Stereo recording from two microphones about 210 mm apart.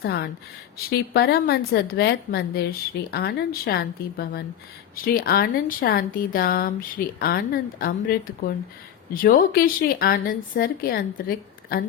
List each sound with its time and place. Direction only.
0.0 s a woman's voice: 50° left (ahead or behind)